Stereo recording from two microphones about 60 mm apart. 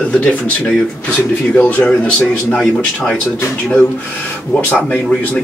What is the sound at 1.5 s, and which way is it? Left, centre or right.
Speech, left.